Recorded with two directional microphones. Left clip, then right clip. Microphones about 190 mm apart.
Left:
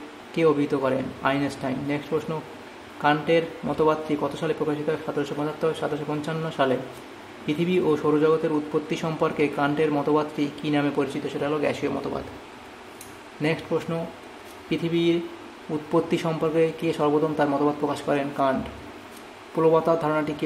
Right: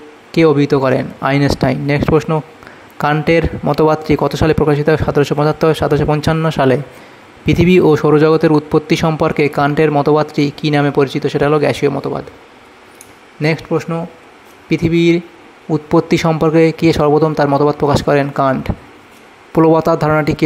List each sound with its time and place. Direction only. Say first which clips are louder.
0.3 s speech: right 11 dB; 40° right (ahead or behind)
13.4 s speech: right 9 dB; 40° right (ahead or behind)